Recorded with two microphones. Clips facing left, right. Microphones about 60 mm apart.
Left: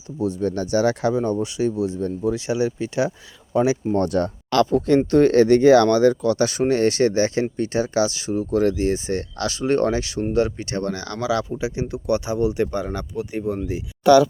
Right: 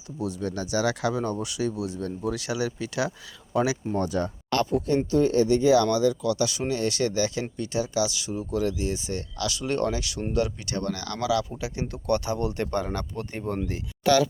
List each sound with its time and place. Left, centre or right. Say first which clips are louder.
0.2 s speech: left 7 dB; left
3.9 s speech: left 6 dB; left
5.1 s speech: left 7 dB; left; by 13.6 s centre